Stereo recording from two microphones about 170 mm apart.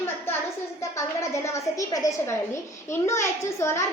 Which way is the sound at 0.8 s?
15° left (ahead or behind).